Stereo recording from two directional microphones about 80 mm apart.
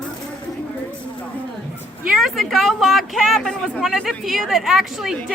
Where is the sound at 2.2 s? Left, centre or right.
Centre.